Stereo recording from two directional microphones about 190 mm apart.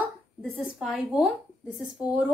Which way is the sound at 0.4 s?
Centre (ahead or behind).